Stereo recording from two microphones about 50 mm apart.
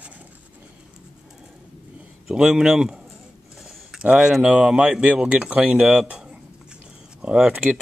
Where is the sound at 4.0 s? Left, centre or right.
Right.